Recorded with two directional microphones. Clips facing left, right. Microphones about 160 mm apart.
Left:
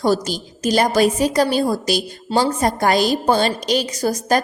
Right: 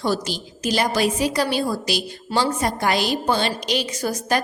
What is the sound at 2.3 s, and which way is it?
Speech, 25° left (ahead or behind).